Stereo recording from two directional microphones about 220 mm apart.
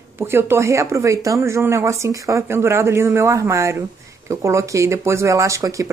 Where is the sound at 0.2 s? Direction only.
10° right (ahead or behind).